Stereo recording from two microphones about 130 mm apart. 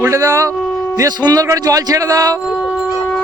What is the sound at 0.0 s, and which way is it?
Speech, 25° right (ahead or behind).